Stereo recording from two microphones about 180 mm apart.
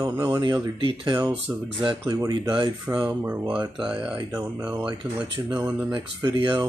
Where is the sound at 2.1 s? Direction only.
25° right (ahead or behind).